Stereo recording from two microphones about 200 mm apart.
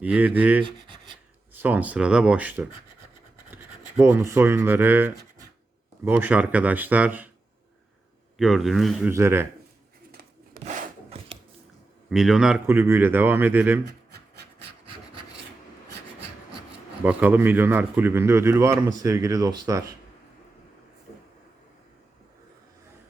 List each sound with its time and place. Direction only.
0.0 s a man's voice: 5° right (ahead or behind)
0.6 s a sound: 25° right (ahead or behind)
1.5 s a man's voice: 10° right (ahead or behind)
8.4 s a man's voice: centre (ahead or behind)
9.0 s a man's voice: 10° right (ahead or behind)
10.1 s rub: 50° right (ahead or behind)
10.6 s wood: 40° right (ahead or behind)
12.0 s a man's voice: centre (ahead or behind)
17.0 s a man's voice: 5° right (ahead or behind)